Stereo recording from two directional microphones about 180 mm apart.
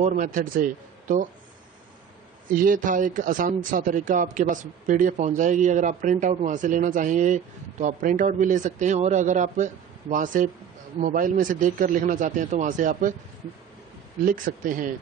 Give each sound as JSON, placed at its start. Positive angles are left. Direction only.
{"t": 0.0, "sound": "a man's voice", "side_deg": -45}
{"t": 2.4, "sound": "a man's voice", "side_deg": -50}
{"t": 14.2, "sound": "a man's voice", "side_deg": -50}